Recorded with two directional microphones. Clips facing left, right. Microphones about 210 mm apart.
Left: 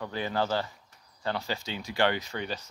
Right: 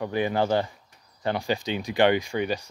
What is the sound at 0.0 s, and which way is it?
Speech, 15° right (ahead or behind).